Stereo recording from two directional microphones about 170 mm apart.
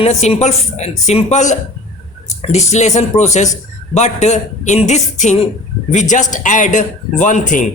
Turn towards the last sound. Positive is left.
turn(degrees=50)  # may be behind; listen again after turning